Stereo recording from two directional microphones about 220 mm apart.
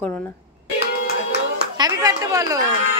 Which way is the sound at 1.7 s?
15° right (ahead or behind).